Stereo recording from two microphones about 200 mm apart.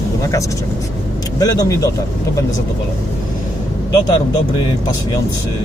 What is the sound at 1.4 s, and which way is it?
Speech, 20° left (ahead or behind).